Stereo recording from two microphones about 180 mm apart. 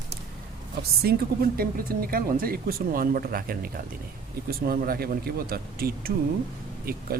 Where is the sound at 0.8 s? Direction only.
60° right (ahead or behind).